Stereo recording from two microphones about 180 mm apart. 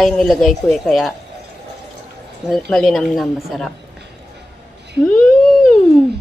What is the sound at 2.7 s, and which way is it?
A man's voice, centre (ahead or behind).